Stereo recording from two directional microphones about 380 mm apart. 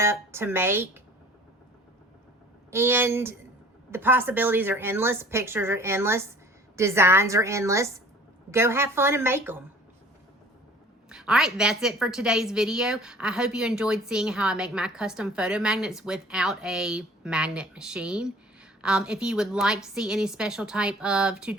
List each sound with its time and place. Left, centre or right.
0.0 s a woman's voice: centre
2.6 s a woman's voice: centre
11.1 s a woman's voice: centre